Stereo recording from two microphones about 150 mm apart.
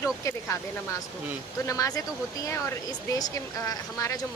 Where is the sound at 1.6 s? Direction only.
20° left (ahead or behind).